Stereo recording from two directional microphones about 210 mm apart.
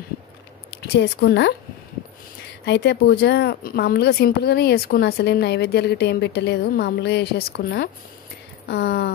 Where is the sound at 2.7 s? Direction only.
50° left (ahead or behind).